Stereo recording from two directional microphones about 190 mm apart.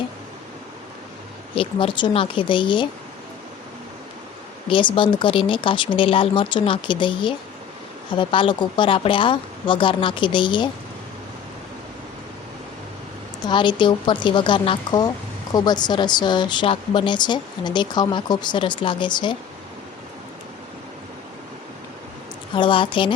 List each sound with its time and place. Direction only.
1.5 s speech: 25° left (ahead or behind)
4.7 s speech: 25° left (ahead or behind)
13.4 s speech: 25° left (ahead or behind)
22.5 s speech: 25° left (ahead or behind)